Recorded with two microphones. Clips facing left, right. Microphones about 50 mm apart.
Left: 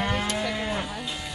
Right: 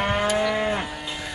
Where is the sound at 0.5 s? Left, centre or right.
Right.